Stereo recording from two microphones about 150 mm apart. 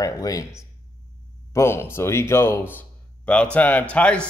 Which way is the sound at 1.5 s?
15° left (ahead or behind).